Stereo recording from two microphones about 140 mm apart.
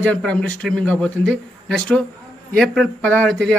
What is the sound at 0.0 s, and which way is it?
Speech, 10° left (ahead or behind).